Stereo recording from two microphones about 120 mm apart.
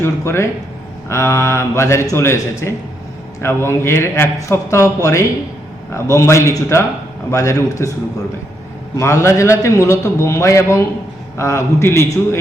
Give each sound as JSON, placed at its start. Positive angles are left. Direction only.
{"t": 0.0, "sound": "a man's voice", "side_deg": 25}
{"t": 9.0, "sound": "a man's voice", "side_deg": 25}